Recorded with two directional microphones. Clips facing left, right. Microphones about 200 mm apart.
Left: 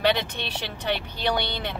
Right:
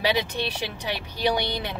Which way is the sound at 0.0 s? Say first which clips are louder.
Even; 10° right (ahead or behind).